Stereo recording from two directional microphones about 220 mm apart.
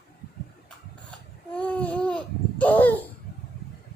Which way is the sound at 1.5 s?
5° left (ahead or behind).